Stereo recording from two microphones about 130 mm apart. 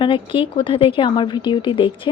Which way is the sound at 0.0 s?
40° left (ahead or behind).